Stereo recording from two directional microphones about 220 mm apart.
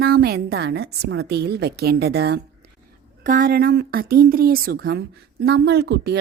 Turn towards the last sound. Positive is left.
turn(degrees=-50)  # may be behind; listen again after turning